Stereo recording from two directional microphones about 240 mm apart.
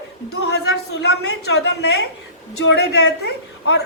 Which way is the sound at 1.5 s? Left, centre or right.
Left.